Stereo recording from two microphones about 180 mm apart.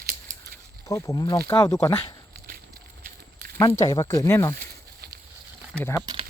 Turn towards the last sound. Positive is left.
turn(degrees=10)  # may be behind; listen again after turning